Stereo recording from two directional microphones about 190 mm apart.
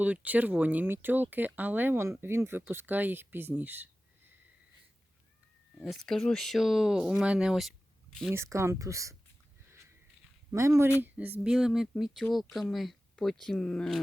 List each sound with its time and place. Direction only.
0.0 s speech: 10° right (ahead or behind)
6.1 s speech: centre (ahead or behind)
8.3 s speech: 15° right (ahead or behind)
10.5 s speech: 15° right (ahead or behind); by 14.0 s 5° left (ahead or behind)